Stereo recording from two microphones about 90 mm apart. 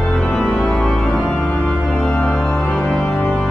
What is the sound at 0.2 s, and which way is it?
Organ, 10° left (ahead or behind).